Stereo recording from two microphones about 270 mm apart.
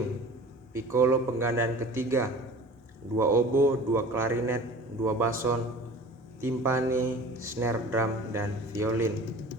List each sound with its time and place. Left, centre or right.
0.7 s speech: centre